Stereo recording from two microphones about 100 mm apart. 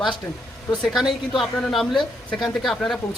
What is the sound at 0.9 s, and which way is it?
Speech, centre (ahead or behind).